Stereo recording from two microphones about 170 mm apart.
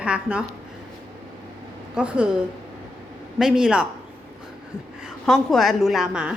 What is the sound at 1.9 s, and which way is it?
Speech, 5° right (ahead or behind).